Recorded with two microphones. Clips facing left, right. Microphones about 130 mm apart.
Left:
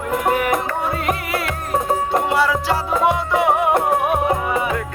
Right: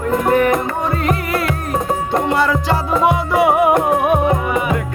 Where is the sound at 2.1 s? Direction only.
5° left (ahead or behind); by 4.7 s 10° right (ahead or behind).